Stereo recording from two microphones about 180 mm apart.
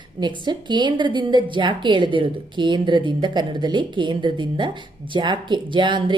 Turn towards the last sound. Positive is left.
turn(degrees=-25)  # may be behind; listen again after turning